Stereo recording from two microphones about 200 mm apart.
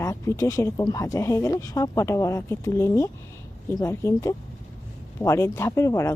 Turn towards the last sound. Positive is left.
turn(degrees=15)  # may be behind; listen again after turning